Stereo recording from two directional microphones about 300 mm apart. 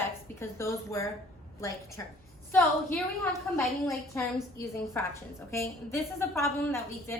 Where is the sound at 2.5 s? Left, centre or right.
Centre.